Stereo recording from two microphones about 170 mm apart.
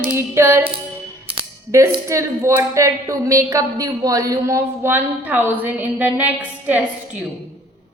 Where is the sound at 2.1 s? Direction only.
15° right (ahead or behind).